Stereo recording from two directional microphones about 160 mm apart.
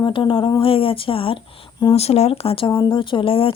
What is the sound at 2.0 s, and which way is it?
Speech, 40° left (ahead or behind).